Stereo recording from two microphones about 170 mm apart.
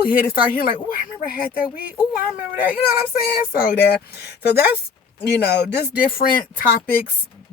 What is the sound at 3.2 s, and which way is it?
Speech, 60° left (ahead or behind).